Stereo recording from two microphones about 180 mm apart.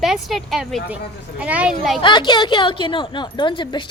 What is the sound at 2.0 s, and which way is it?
A woman's voice, 25° left (ahead or behind).